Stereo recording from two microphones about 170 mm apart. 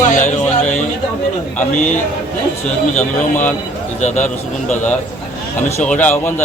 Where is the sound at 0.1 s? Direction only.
45° left (ahead or behind).